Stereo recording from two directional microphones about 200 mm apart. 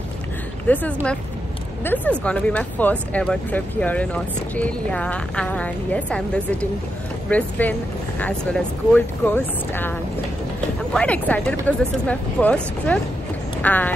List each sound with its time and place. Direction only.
0.7 s speech: 10° left (ahead or behind)
1.9 s speech: 5° left (ahead or behind)
13.6 s a sound: 10° left (ahead or behind)